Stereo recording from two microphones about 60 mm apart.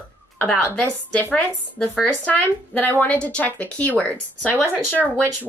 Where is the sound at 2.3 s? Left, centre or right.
Left.